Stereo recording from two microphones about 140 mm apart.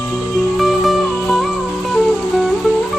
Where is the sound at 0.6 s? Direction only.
Centre (ahead or behind).